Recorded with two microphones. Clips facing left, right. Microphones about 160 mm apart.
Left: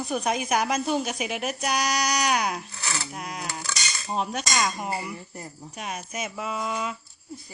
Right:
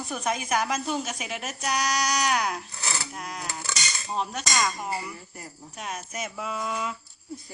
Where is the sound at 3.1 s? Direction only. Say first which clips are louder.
Left 2 dB; 15° left (ahead or behind).